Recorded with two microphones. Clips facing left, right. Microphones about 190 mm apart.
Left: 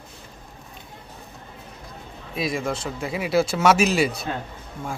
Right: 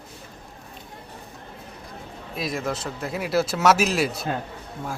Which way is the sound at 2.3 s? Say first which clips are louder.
Left 2 dB; centre (ahead or behind).